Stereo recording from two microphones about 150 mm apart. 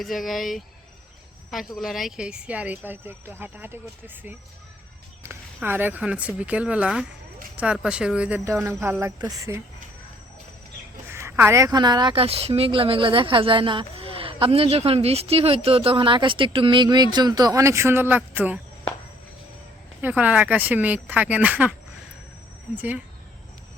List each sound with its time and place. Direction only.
0.0 s speech: centre (ahead or behind)
5.6 s speech: 15° right (ahead or behind)
11.1 s a woman's voice: 15° right (ahead or behind)
20.0 s speech: 10° right (ahead or behind)